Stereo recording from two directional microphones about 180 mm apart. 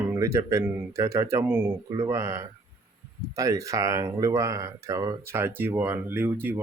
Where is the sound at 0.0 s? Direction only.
15° right (ahead or behind).